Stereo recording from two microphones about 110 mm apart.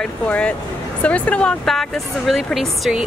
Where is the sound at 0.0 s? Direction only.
10° left (ahead or behind).